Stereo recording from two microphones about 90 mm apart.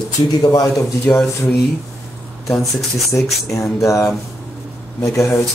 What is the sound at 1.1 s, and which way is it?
Speech, 20° left (ahead or behind).